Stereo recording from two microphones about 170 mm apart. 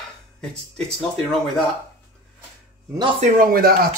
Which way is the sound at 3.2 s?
50° right (ahead or behind).